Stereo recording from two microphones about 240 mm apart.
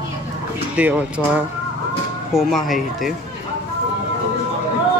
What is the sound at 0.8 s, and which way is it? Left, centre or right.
Speech, centre.